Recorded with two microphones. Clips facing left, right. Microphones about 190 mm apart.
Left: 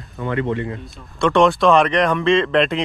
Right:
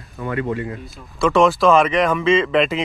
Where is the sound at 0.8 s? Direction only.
Centre (ahead or behind).